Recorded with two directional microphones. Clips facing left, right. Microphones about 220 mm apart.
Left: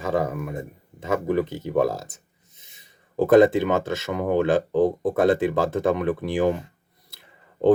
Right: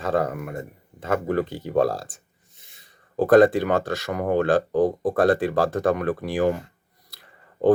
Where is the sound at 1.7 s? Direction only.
20° left (ahead or behind).